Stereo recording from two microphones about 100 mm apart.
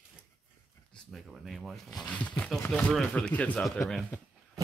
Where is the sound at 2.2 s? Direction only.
15° left (ahead or behind).